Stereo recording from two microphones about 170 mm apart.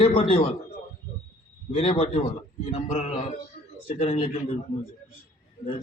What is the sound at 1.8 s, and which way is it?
A man's voice, 35° left (ahead or behind).